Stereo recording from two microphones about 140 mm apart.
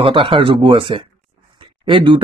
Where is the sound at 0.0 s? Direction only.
40° right (ahead or behind).